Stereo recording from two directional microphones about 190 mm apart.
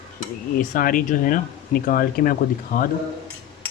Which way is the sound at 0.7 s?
45° left (ahead or behind).